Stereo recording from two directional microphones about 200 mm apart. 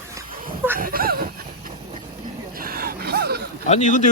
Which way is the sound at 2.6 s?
50° right (ahead or behind).